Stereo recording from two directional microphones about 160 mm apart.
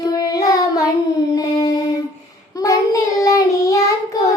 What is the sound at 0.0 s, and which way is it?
Child singing, 20° left (ahead or behind).